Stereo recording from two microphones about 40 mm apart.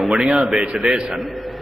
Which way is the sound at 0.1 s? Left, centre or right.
Centre.